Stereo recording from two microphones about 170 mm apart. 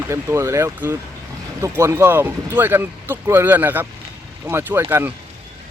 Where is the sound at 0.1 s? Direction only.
15° right (ahead or behind).